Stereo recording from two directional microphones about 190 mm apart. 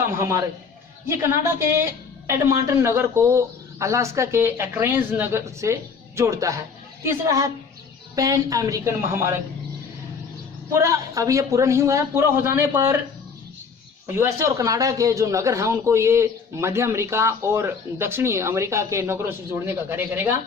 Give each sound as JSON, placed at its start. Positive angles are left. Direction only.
{"t": 0.2, "sound": "speech", "side_deg": -15}
{"t": 10.7, "sound": "speech", "side_deg": -15}
{"t": 14.1, "sound": "speech", "side_deg": -15}